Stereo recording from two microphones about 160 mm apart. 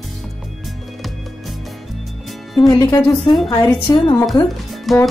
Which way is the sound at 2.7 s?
25° left (ahead or behind).